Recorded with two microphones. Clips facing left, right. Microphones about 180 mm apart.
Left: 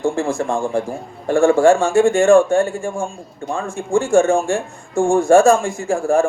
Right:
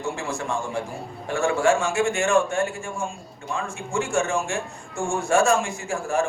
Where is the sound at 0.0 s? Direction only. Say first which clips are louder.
Left 9 dB; 50° left (ahead or behind).